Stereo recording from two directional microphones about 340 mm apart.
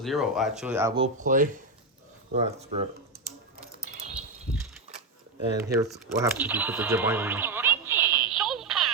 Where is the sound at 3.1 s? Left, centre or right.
Right.